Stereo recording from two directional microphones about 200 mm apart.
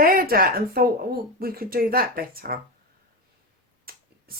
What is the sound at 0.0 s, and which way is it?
Speech, 45° right (ahead or behind).